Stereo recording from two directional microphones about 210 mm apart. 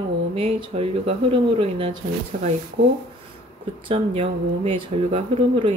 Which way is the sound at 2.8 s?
50° right (ahead or behind).